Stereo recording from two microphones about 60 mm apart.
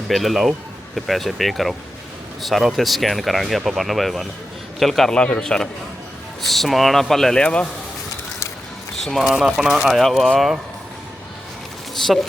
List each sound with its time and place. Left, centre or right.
0.1 s speech: centre
5.1 s a man's voice: centre
7.4 s speech: centre
9.2 s speech: centre
9.9 s speech: centre